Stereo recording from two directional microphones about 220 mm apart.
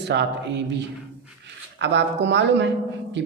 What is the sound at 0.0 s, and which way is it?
Speech, 50° right (ahead or behind).